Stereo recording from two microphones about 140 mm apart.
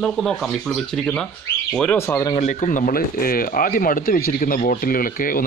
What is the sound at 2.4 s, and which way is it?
Speech, 55° left (ahead or behind).